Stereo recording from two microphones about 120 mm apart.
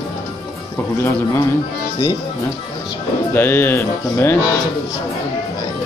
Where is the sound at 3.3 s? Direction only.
20° left (ahead or behind).